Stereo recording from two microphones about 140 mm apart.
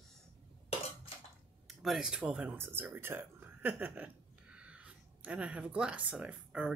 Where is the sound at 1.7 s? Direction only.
Centre (ahead or behind).